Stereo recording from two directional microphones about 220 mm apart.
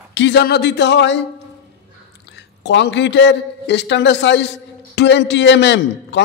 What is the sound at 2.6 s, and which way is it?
A man's voice, 55° left (ahead or behind).